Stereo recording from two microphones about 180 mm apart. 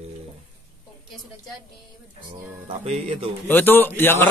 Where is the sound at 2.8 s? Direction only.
35° right (ahead or behind).